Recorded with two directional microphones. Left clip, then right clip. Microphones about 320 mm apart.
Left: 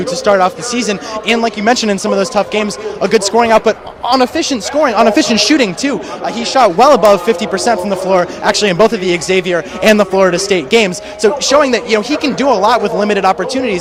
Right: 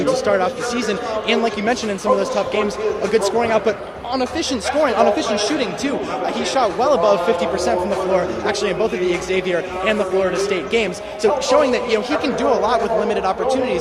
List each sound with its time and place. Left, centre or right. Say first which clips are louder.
0.1 s speech: left 8 dB; left
4.4 s speech: left 5 dB; left
9.8 s speech: left 10 dB; left